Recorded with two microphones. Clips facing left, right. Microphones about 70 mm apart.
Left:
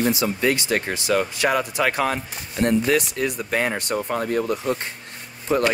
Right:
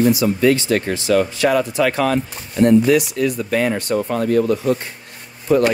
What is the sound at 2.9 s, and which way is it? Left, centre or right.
Speech, left.